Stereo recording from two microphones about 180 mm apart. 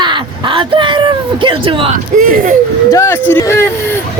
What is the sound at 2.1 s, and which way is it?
Speech, 45° right (ahead or behind).